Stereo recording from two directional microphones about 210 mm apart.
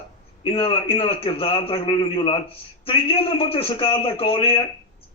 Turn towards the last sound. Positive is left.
turn(degrees=25)  # may be behind; listen again after turning